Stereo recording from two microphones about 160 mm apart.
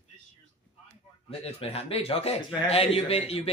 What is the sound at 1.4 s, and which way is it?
Speech, 40° left (ahead or behind).